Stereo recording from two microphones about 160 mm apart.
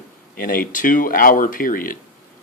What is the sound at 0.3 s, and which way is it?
Speech, 60° left (ahead or behind).